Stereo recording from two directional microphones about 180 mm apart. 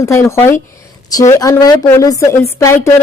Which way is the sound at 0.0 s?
15° left (ahead or behind).